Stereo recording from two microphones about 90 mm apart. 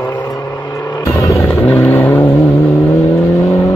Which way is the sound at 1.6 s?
25° left (ahead or behind).